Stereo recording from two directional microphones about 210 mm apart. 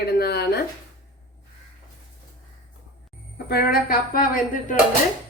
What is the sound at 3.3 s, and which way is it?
Speech, 45° left (ahead or behind).